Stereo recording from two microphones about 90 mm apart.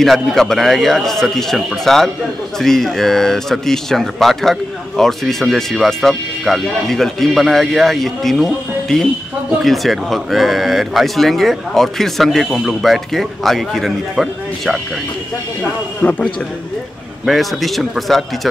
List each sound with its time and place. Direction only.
0.0 s speech: centre (ahead or behind)
16.0 s a man's voice: 15° left (ahead or behind)
17.3 s speech: centre (ahead or behind)